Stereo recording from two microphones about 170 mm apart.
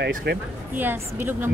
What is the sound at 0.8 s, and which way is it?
Speech, 10° right (ahead or behind).